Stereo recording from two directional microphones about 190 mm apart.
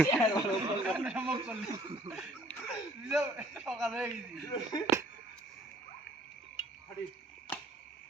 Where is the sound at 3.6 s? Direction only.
Centre (ahead or behind).